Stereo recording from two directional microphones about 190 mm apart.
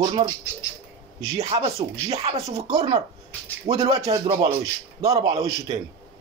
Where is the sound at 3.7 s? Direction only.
35° right (ahead or behind).